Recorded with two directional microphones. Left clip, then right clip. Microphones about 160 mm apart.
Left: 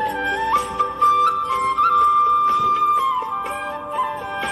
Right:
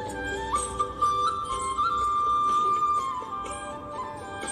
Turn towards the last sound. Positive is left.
turn(degrees=35)  # may be behind; listen again after turning